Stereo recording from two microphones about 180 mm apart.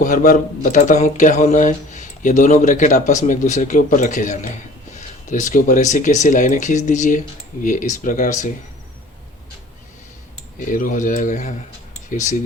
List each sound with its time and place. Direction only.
0.0 s speech: 45° left (ahead or behind)
10.7 s speech: 45° left (ahead or behind)